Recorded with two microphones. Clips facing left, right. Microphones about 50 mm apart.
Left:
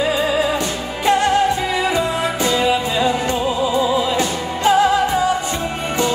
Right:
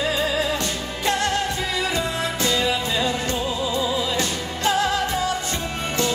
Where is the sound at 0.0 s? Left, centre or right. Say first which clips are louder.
Left 5 dB; centre.